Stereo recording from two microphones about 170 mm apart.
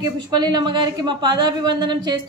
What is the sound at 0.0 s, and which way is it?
A woman's voice, 25° right (ahead or behind).